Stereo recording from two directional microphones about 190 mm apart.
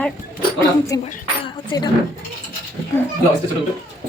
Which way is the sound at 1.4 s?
25° left (ahead or behind).